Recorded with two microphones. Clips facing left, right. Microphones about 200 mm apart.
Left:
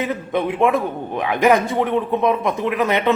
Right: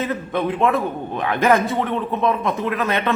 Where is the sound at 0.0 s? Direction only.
15° left (ahead or behind).